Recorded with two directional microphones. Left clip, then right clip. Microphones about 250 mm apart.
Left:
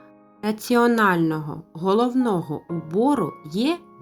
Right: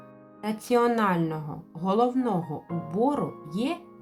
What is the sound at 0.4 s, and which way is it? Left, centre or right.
Speech, left.